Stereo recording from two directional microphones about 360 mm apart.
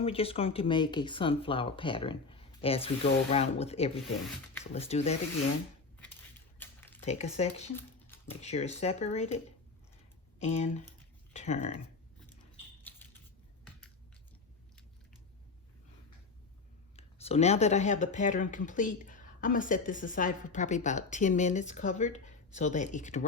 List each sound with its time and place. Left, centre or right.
0.0 s speech: centre
6.6 s a sound: centre
7.0 s speech: centre
7.8 s a sound: centre
8.3 s speech: centre
10.4 s speech: centre
17.0 s speech: centre